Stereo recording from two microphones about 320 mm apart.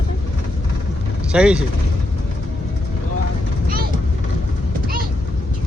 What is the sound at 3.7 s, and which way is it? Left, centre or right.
Vehicle, right.